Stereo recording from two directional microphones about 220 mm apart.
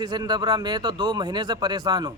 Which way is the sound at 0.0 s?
20° right (ahead or behind).